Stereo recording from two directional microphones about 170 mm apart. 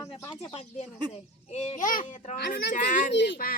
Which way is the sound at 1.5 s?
45° left (ahead or behind).